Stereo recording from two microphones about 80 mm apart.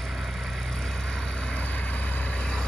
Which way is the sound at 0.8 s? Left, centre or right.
Centre.